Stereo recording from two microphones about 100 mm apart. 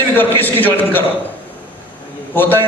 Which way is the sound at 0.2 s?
20° left (ahead or behind).